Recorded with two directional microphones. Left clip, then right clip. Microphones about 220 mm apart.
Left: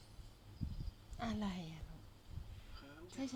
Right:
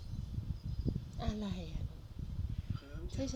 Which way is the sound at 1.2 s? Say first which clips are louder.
Left 2 dB; 35° left (ahead or behind).